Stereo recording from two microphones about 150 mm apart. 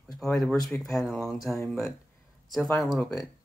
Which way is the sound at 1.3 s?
20° left (ahead or behind).